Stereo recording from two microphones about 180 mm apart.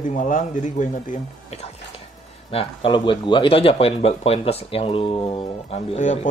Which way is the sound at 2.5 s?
30° left (ahead or behind).